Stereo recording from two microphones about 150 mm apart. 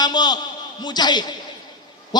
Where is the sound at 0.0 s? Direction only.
30° left (ahead or behind).